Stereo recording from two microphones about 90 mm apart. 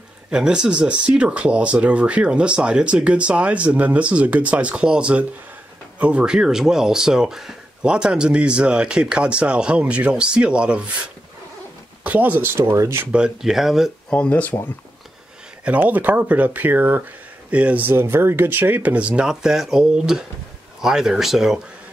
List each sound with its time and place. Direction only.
0.3 s speech: 10° right (ahead or behind)
12.0 s speech: 15° right (ahead or behind)
13.0 s speech: 10° right (ahead or behind)
14.1 s speech: 15° left (ahead or behind)
15.6 s speech: 15° right (ahead or behind)